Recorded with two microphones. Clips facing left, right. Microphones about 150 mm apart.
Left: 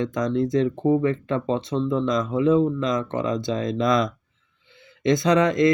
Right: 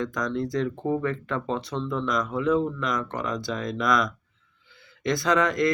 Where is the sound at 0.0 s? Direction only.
20° left (ahead or behind).